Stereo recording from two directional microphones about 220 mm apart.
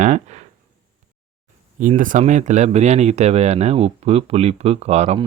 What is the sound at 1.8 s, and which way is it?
Speech, 35° right (ahead or behind).